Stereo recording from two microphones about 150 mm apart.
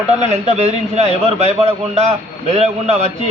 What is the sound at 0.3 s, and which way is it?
A man's voice, 50° right (ahead or behind).